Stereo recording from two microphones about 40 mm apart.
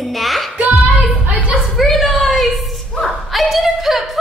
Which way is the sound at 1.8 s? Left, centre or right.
Centre.